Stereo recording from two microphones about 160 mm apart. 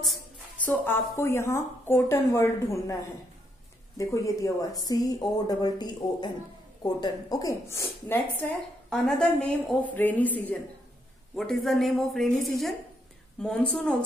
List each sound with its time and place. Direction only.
0.0 s speech: 5° left (ahead or behind)
4.0 s a woman's voice: 20° left (ahead or behind); by 12.3 s centre (ahead or behind)
13.4 s speech: 5° left (ahead or behind)